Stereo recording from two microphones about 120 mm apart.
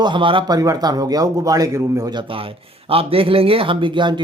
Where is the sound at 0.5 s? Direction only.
30° right (ahead or behind).